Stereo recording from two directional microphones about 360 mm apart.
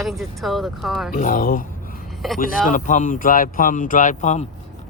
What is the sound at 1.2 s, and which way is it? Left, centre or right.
Speech, left.